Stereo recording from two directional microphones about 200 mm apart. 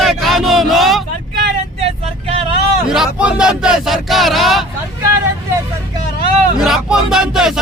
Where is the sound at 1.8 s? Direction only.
30° right (ahead or behind).